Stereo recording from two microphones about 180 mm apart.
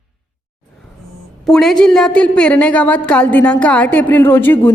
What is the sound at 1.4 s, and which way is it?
A woman's voice, 5° left (ahead or behind).